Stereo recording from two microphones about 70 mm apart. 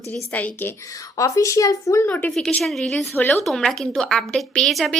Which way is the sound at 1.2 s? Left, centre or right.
Left.